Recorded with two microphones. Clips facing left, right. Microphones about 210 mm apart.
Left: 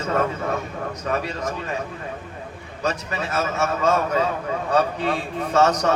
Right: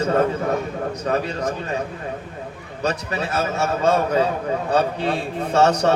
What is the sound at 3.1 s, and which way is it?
A man's voice, 35° right (ahead or behind).